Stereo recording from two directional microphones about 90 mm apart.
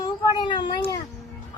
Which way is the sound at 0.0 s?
60° left (ahead or behind).